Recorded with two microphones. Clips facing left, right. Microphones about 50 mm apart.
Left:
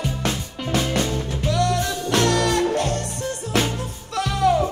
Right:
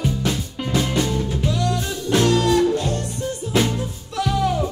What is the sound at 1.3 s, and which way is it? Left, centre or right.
Music, left.